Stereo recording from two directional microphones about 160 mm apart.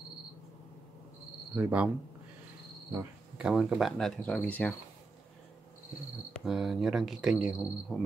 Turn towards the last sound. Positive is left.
turn(degrees=0)  # may be behind; listen again after turning